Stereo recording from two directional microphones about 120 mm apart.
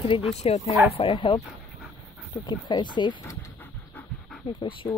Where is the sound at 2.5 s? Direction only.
40° left (ahead or behind).